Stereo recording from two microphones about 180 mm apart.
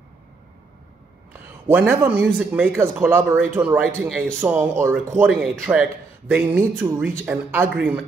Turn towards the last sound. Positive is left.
turn(degrees=-10)  # may be behind; listen again after turning